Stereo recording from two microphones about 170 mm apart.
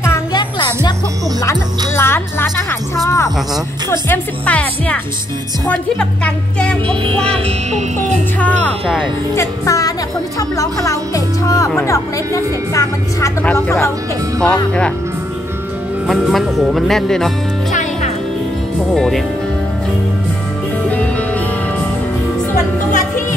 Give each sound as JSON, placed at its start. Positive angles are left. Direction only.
{"t": 0.0, "sound": "music", "side_deg": 15}
{"t": 0.4, "sound": "music", "side_deg": 25}
{"t": 2.0, "sound": "speech", "side_deg": 15}
{"t": 6.9, "sound": "music", "side_deg": -30}
{"t": 8.4, "sound": "speech", "side_deg": 10}
{"t": 16.1, "sound": "speech", "side_deg": 0}
{"t": 18.9, "sound": "speech", "side_deg": 0}
{"t": 20.9, "sound": "music", "side_deg": 10}